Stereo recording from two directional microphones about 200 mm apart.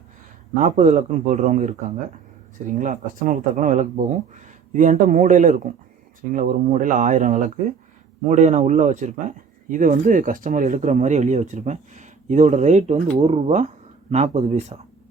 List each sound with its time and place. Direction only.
0.5 s speech: 35° right (ahead or behind)